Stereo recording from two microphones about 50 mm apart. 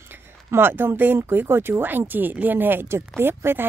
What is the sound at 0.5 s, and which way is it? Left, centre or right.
Speech, right.